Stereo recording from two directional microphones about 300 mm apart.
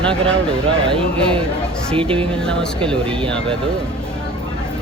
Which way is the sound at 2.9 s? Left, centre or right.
Centre.